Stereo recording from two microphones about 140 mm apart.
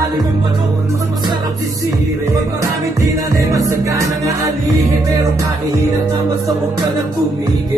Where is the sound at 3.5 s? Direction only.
20° right (ahead or behind).